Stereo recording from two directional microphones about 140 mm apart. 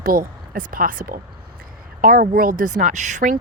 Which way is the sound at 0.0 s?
90° right.